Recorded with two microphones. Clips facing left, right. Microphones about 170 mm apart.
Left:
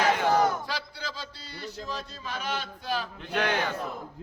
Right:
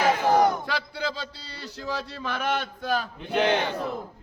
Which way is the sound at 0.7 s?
65° right (ahead or behind).